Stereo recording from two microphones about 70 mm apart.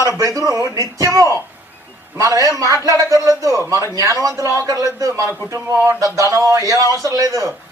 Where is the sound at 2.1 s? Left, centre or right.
Right.